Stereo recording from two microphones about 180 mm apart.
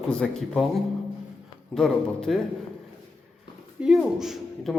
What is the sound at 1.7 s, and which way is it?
Speech, 5° left (ahead or behind).